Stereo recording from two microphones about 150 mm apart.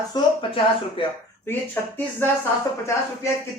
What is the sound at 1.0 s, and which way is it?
Speech, 35° left (ahead or behind).